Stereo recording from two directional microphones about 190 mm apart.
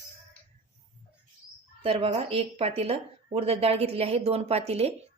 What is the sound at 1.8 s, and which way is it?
A woman's voice, 30° right (ahead or behind).